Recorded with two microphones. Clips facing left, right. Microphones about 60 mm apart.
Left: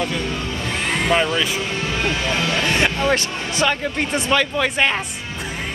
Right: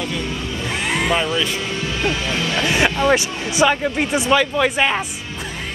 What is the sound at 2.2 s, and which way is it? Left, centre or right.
Speech, left.